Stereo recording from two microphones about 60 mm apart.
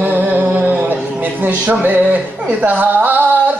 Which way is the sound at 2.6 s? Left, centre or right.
Right.